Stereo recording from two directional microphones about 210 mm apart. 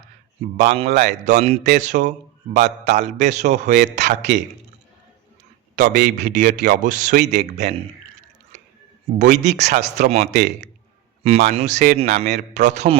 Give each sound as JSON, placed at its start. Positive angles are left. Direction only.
{"t": 0.8, "sound": "speech", "side_deg": -30}
{"t": 5.7, "sound": "a man's voice", "side_deg": -40}
{"t": 6.1, "sound": "speech", "side_deg": -35}
{"t": 9.1, "sound": "speech", "side_deg": -35}